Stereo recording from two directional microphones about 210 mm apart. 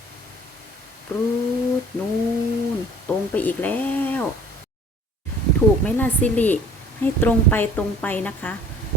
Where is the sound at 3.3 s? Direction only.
10° left (ahead or behind).